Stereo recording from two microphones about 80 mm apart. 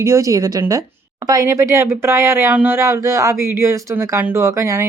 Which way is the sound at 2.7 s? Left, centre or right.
Right.